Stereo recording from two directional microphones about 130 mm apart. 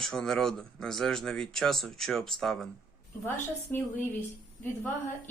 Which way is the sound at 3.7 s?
15° left (ahead or behind).